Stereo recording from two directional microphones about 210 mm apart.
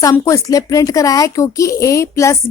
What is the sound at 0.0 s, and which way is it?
Speech, 15° left (ahead or behind).